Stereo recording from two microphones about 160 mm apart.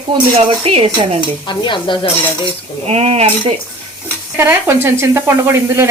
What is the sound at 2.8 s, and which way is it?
Speech, 40° right (ahead or behind).